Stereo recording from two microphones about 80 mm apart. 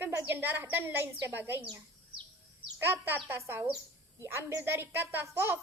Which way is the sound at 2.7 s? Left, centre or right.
Right.